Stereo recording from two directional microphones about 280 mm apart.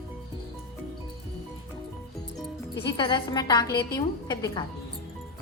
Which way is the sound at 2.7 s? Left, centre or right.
Centre.